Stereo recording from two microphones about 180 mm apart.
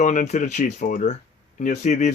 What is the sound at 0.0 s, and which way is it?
Speech, 45° left (ahead or behind).